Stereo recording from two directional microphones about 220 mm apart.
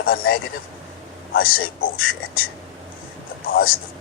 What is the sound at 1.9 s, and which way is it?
Speech, 65° left (ahead or behind).